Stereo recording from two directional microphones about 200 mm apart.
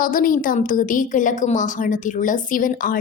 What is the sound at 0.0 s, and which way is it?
A woman's voice, 45° left (ahead or behind).